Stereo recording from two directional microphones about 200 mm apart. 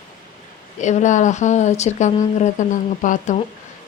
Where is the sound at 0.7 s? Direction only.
35° left (ahead or behind).